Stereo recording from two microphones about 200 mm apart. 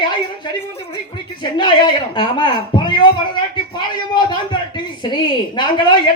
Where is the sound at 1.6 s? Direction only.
20° left (ahead or behind).